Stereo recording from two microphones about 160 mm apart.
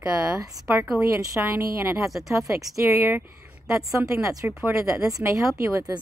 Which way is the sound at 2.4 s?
20° right (ahead or behind).